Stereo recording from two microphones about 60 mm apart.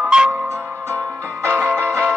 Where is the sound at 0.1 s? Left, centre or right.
Centre.